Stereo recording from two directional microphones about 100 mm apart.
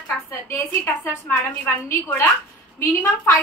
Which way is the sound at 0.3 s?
20° left (ahead or behind).